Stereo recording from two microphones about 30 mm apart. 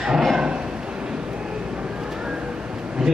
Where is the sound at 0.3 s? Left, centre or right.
Right.